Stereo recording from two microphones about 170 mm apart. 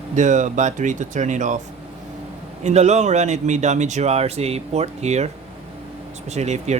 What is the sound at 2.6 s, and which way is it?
Speech, 40° right (ahead or behind).